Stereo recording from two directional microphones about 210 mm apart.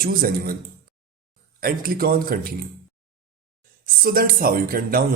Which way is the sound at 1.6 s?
45° right (ahead or behind).